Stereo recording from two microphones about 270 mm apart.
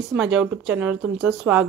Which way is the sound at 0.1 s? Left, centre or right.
Centre.